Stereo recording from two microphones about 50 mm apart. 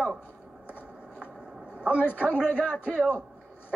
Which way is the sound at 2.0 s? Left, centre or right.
Left.